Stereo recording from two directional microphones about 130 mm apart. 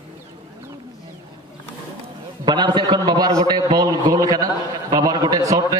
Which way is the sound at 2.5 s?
35° right (ahead or behind).